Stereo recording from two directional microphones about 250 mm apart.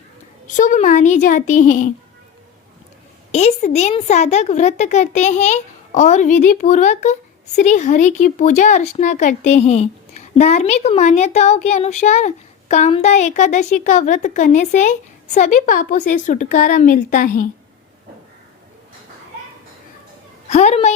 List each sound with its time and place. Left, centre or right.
0.4 s speech: left
3.3 s speech: left
20.5 s speech: left